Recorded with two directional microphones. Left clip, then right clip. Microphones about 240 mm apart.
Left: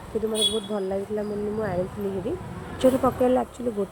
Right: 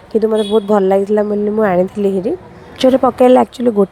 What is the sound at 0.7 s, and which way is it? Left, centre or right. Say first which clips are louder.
Speech: right 16 dB; right.